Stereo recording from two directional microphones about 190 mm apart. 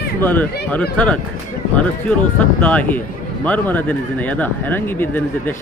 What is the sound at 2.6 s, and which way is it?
Speech, 5° left (ahead or behind).